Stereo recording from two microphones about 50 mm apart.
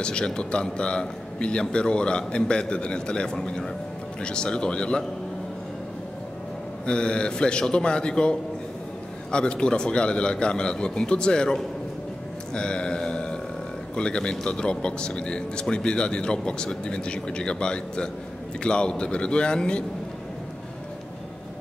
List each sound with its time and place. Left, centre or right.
0.0 s a man's voice: centre
6.9 s a man's voice: centre
12.5 s a sound: centre
13.9 s a man's voice: centre